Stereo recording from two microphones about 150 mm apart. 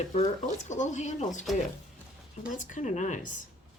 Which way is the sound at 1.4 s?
Centre (ahead or behind).